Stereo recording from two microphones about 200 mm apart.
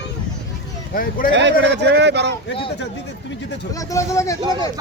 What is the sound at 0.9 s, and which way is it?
Speech, 45° left (ahead or behind).